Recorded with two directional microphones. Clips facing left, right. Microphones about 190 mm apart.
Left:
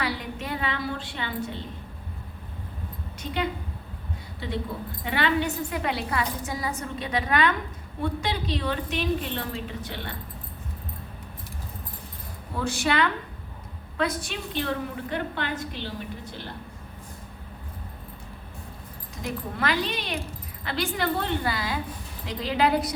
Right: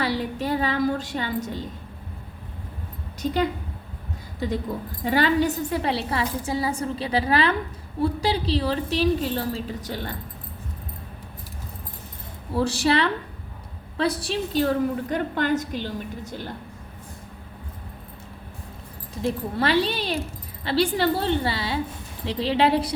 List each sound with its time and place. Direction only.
0.0 s a sound: 35° right (ahead or behind)
5.0 s a woman's voice: 35° right (ahead or behind)
12.5 s a woman's voice: 35° right (ahead or behind)
19.1 s a woman's voice: 30° right (ahead or behind)